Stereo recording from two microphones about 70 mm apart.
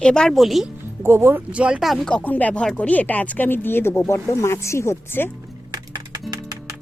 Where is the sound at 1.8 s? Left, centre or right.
Centre.